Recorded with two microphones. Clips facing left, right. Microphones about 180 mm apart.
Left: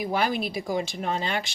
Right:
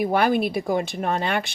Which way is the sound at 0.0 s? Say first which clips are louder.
Right 6 dB; 55° right (ahead or behind).